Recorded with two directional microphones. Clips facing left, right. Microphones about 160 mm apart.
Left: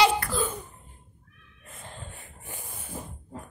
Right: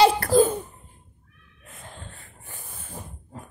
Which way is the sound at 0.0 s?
40° right (ahead or behind).